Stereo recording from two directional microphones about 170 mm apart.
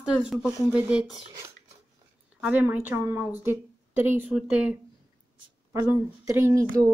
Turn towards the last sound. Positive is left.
turn(degrees=-20)  # may be behind; listen again after turning